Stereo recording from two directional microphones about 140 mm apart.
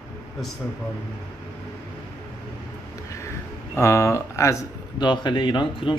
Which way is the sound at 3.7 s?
20° left (ahead or behind).